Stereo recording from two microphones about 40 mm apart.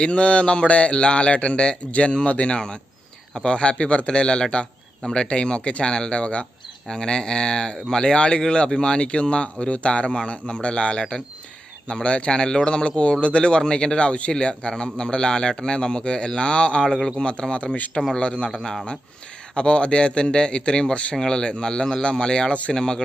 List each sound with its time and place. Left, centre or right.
0.0 s a man's voice: left
18.5 s speech: centre
19.5 s speech: left
21.2 s speech: centre